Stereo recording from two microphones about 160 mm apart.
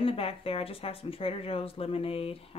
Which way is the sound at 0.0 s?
35° left (ahead or behind).